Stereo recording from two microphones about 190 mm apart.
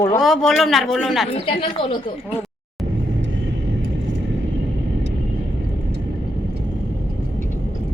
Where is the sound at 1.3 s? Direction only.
30° left (ahead or behind).